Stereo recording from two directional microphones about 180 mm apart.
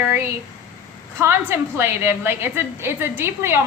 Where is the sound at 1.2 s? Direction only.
15° right (ahead or behind).